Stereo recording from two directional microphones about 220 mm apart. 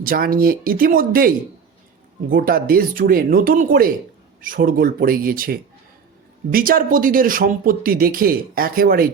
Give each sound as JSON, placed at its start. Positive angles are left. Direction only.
{"t": 0.0, "sound": "speech", "side_deg": -40}
{"t": 2.3, "sound": "speech", "side_deg": -40}